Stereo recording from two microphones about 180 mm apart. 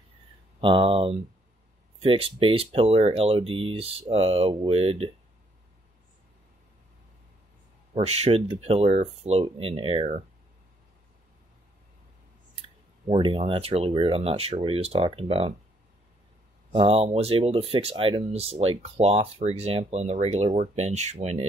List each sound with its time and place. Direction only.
0.6 s speech: 30° right (ahead or behind)
7.9 s speech: 35° right (ahead or behind)
12.5 s speech: 30° right (ahead or behind)
16.7 s speech: 30° right (ahead or behind)